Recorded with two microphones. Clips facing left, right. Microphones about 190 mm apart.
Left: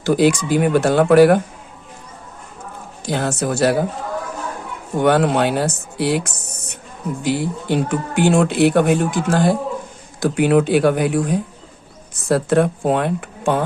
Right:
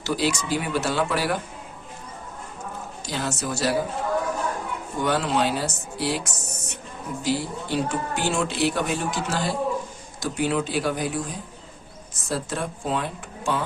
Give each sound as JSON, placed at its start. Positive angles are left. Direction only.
{"t": 0.0, "sound": "speech", "side_deg": 55}
{"t": 3.1, "sound": "speech", "side_deg": 55}
{"t": 4.9, "sound": "speech", "side_deg": 60}